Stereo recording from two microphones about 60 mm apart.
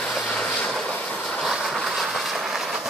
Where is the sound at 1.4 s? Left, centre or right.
Centre.